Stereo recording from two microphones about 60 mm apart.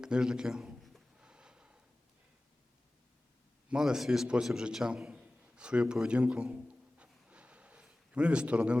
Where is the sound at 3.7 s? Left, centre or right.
Centre.